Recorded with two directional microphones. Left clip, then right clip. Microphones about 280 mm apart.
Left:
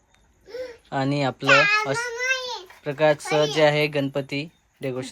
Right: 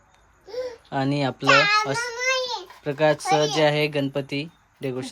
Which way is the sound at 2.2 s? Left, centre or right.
Right.